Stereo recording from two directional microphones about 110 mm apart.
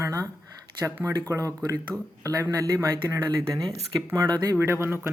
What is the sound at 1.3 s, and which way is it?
Speech, 30° right (ahead or behind).